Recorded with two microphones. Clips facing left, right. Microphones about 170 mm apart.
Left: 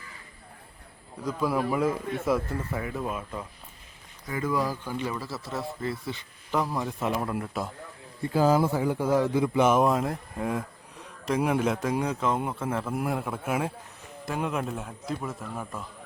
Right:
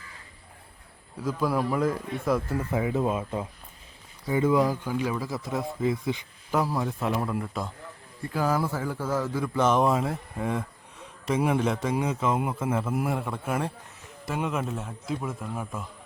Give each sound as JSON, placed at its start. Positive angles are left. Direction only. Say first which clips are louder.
{"t": 1.2, "sound": "speech", "louder": "right 1 dB", "side_deg": 0}
{"t": 2.6, "sound": "speech", "louder": "right 6 dB", "side_deg": -20}
{"t": 8.2, "sound": "speech", "louder": "left 4 dB", "side_deg": 25}